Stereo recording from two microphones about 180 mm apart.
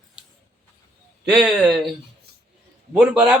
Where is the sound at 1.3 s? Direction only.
Centre (ahead or behind).